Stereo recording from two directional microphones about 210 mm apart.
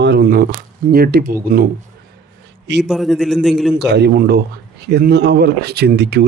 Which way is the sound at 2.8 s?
Centre (ahead or behind).